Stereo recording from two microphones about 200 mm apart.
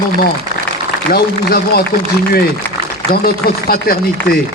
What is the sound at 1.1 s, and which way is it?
Speech, 50° left (ahead or behind).